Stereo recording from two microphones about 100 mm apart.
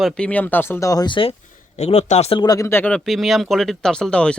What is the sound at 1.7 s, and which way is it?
Speech, 90° left.